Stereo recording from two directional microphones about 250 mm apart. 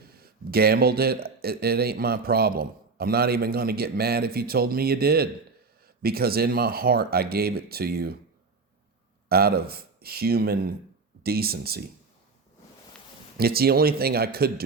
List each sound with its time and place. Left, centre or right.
0.0 s speech: right
9.3 s speech: right
13.3 s speech: right